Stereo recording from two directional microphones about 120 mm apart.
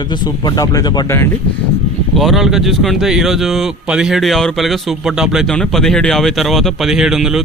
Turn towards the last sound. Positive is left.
turn(degrees=-5)  # may be behind; listen again after turning